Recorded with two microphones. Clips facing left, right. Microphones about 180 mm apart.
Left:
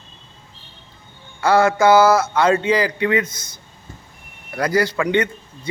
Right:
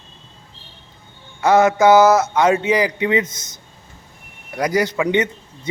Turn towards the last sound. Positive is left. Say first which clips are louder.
# right 1 dB
turn(degrees=-20)  # may be behind; listen again after turning